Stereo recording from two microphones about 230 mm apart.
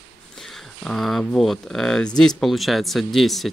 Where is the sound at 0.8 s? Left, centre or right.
Centre.